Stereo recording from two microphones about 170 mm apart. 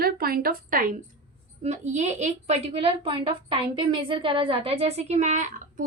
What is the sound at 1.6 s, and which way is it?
A woman's voice, 40° right (ahead or behind).